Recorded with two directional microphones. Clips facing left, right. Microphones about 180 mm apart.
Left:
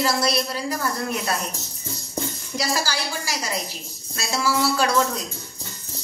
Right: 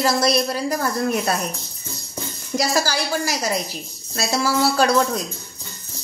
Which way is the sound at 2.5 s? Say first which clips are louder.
Right 5 dB; 45° right (ahead or behind).